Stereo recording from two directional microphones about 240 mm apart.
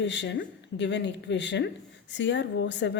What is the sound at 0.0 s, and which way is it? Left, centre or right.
A woman's voice, left.